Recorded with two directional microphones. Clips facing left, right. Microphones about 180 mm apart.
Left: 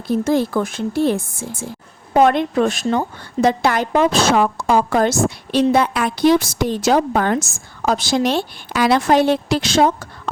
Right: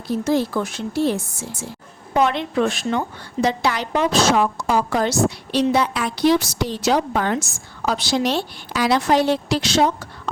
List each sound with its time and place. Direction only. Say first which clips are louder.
0.1 s a woman's voice: left 3 dB; 50° left (ahead or behind)